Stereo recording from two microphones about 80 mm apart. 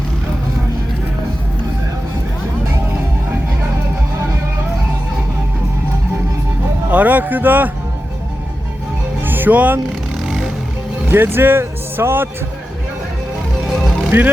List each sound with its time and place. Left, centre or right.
6.9 s speech: right
9.2 s speech: right
10.2 s music: centre
11.1 s speech: right
14.1 s speech: right